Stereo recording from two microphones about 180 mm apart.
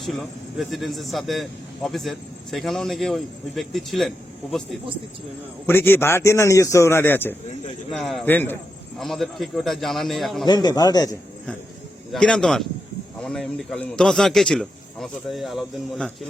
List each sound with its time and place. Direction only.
0.0 s speech: centre (ahead or behind)
5.6 s a man's voice: 10° left (ahead or behind)
10.4 s a man's voice: 25° left (ahead or behind)
12.1 s speech: 5° left (ahead or behind)